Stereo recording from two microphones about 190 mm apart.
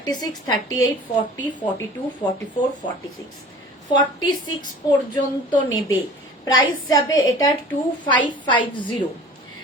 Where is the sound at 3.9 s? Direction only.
20° left (ahead or behind).